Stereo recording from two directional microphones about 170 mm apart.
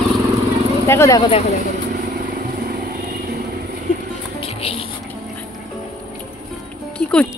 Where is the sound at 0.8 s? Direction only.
15° left (ahead or behind).